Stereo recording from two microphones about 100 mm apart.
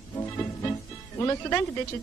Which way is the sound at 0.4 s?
25° left (ahead or behind).